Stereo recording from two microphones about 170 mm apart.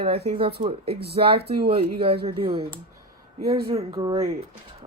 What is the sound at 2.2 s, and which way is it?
Speech, 35° right (ahead or behind).